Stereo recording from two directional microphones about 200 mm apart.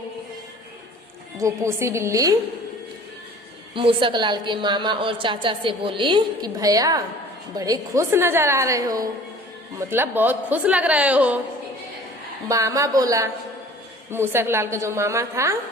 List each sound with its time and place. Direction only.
1.4 s a woman's voice: 15° right (ahead or behind)
3.8 s a woman's voice: 25° right (ahead or behind); by 11.3 s 5° right (ahead or behind)
12.5 s a woman's voice: 15° right (ahead or behind)